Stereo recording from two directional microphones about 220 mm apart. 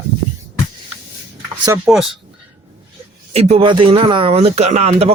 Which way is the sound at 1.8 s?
Centre (ahead or behind).